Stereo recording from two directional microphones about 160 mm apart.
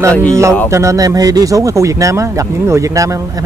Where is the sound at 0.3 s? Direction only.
20° right (ahead or behind).